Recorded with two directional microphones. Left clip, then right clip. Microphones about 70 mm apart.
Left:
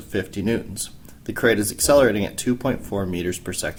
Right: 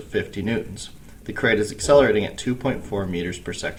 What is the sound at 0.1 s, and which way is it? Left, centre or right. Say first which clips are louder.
Speech: left 1 dB; left.